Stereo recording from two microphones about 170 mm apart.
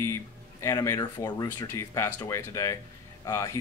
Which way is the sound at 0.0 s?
15° left (ahead or behind).